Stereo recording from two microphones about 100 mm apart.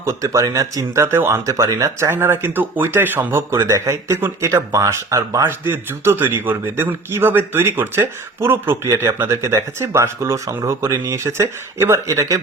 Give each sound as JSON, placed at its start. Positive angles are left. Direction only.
{"t": 0.0, "sound": "speech", "side_deg": -35}